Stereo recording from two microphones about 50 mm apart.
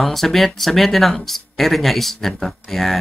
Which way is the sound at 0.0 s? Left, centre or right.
Centre.